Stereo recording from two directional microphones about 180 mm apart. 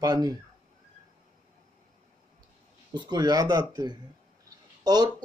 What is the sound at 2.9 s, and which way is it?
Speech, 25° right (ahead or behind).